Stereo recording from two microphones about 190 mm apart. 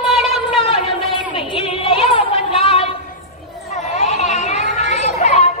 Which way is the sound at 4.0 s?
35° left (ahead or behind).